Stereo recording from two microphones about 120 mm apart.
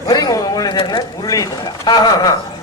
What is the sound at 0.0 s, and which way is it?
Speech, 35° left (ahead or behind).